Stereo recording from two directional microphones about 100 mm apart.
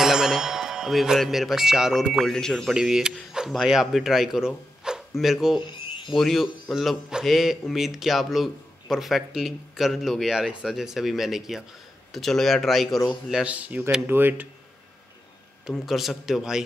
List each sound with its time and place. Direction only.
0.0 s a man's voice: 5° right (ahead or behind)
13.3 s speech: 10° right (ahead or behind)
15.7 s a man's voice: centre (ahead or behind)